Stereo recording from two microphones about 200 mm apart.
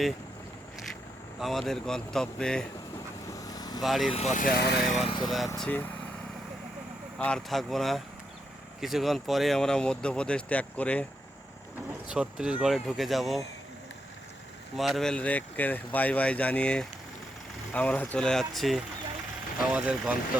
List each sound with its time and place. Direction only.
1.4 s speech: centre (ahead or behind)
3.4 s vehicle: 20° left (ahead or behind)
3.8 s speech: centre (ahead or behind)
4.1 s speech: 35° left (ahead or behind); by 4.8 s 50° left (ahead or behind)
4.8 s speech: centre (ahead or behind)
5.0 s speech: 25° left (ahead or behind)
5.5 s speech: 5° left (ahead or behind)
7.2 s speech: 5° left (ahead or behind)
11.9 s speech: 5° right (ahead or behind)
14.8 s speech: centre (ahead or behind)